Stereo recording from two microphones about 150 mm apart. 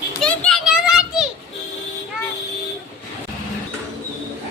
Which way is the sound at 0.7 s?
5° right (ahead or behind).